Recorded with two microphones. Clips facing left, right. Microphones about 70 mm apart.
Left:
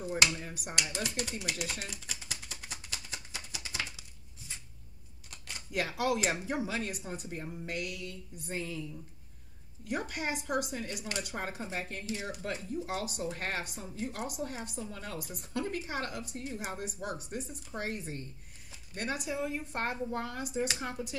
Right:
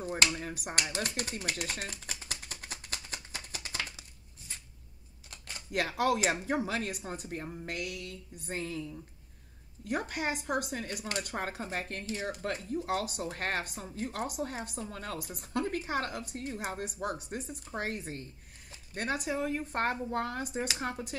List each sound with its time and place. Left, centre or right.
0.0 s speech: right
1.6 s a sound: right
5.7 s speech: right
7.6 s speech: right
9.8 s speech: right